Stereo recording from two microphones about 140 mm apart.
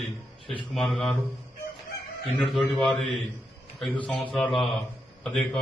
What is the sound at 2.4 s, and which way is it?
Speech, centre (ahead or behind).